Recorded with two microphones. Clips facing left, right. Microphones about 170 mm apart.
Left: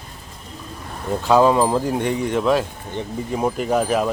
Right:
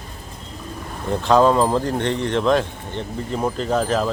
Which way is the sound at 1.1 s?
10° left (ahead or behind).